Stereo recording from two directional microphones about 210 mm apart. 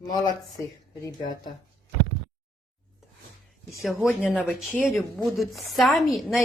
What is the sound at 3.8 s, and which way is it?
A woman's voice, 5° left (ahead or behind).